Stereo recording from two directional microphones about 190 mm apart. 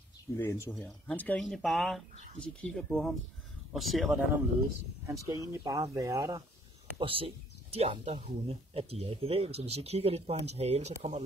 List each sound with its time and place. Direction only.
0.4 s speech: 15° left (ahead or behind)
0.7 s speech: centre (ahead or behind)
5.0 s speech: 15° right (ahead or behind)
7.0 s speech: 30° right (ahead or behind)